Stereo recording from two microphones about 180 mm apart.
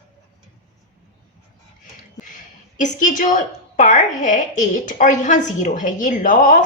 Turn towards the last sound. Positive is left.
turn(degrees=45)  # may be behind; listen again after turning